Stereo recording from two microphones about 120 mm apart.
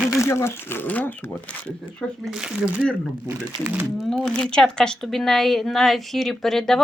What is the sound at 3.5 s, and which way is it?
Speech, 40° right (ahead or behind).